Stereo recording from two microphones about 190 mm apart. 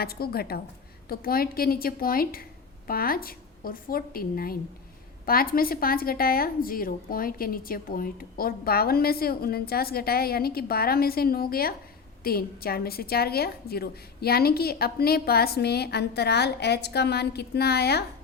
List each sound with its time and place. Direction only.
0.0 s a woman's voice: 55° left (ahead or behind)